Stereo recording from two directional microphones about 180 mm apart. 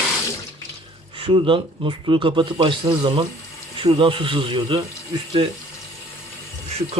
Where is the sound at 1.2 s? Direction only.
30° right (ahead or behind).